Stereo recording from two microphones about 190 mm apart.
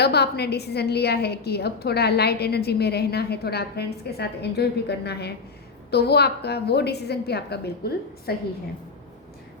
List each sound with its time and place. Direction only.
0.0 s a woman's voice: 60° left (ahead or behind)